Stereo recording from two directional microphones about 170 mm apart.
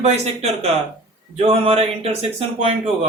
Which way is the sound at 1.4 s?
35° right (ahead or behind).